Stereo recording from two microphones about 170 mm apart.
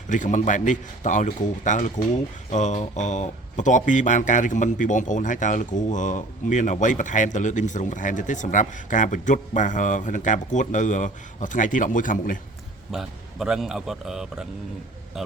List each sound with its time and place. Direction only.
0.1 s speech: 45° left (ahead or behind)
12.9 s a man's voice: centre (ahead or behind)